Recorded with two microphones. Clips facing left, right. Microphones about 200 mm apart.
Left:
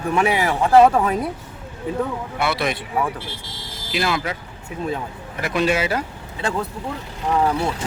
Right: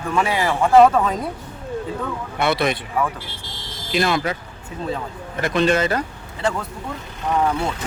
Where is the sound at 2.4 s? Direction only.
5° left (ahead or behind).